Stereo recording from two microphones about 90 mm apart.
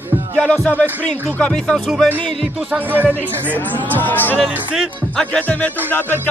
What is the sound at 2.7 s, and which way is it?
Speech, 20° right (ahead or behind).